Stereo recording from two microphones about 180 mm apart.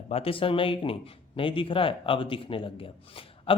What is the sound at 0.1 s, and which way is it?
Speech, 30° left (ahead or behind).